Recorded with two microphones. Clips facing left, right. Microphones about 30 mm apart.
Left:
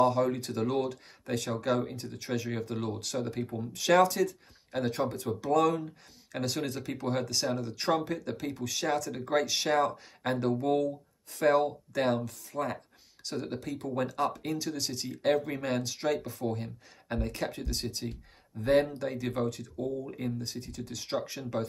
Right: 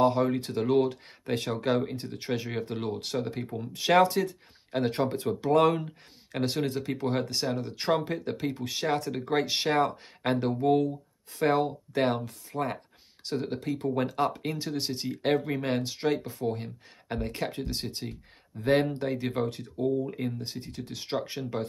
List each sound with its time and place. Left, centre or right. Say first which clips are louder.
0.0 s speech: right 2 dB; right
6.3 s speech: right 4 dB; right